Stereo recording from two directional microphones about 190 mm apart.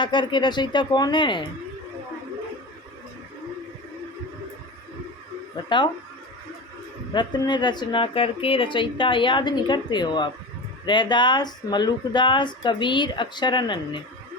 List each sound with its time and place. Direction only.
0.0 s speech: 25° left (ahead or behind)
5.6 s speech: 25° left (ahead or behind)
7.1 s speech: 25° left (ahead or behind)